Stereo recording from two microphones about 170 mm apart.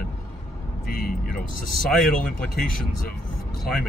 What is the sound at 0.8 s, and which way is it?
Speech, 55° left (ahead or behind).